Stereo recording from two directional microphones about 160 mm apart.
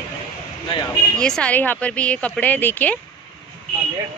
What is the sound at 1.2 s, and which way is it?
Speech, 5° left (ahead or behind).